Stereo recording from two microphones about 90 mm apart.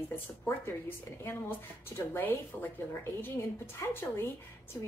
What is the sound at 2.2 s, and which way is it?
Speech, 20° left (ahead or behind).